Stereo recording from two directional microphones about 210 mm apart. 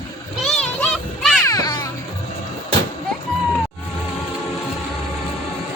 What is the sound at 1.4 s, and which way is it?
Music, 15° left (ahead or behind).